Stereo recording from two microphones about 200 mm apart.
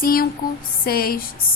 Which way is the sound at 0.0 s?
45° left (ahead or behind).